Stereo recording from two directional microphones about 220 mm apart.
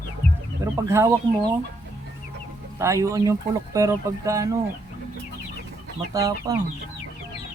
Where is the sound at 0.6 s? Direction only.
10° right (ahead or behind).